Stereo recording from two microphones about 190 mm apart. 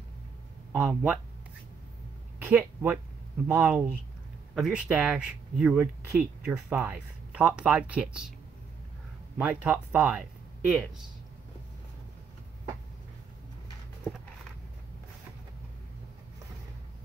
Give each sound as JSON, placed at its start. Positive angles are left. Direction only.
{"t": 0.7, "sound": "speech", "side_deg": -10}
{"t": 2.3, "sound": "speech", "side_deg": -10}
{"t": 9.4, "sound": "speech", "side_deg": -10}